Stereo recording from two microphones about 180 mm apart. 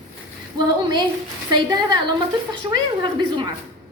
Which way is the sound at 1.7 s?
25° right (ahead or behind).